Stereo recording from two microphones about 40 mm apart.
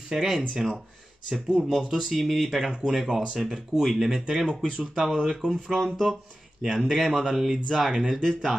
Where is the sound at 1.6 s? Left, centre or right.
Centre.